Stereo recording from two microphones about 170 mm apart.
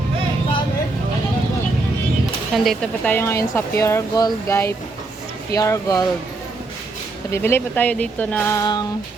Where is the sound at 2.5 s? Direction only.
Centre (ahead or behind); by 6.0 s 20° left (ahead or behind).